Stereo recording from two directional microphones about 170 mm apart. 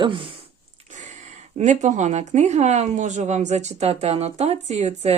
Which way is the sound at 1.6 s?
45° right (ahead or behind).